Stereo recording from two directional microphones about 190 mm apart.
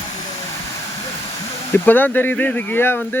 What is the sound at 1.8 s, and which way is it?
Speech, 10° left (ahead or behind).